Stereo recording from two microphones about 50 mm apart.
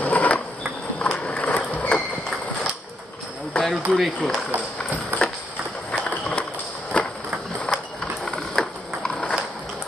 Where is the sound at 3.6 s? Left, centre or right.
Centre.